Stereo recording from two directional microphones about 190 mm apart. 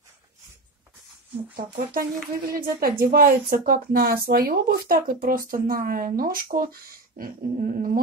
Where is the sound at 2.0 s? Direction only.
50° right (ahead or behind).